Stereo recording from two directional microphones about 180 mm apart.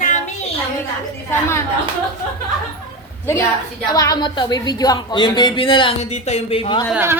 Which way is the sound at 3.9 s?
20° left (ahead or behind).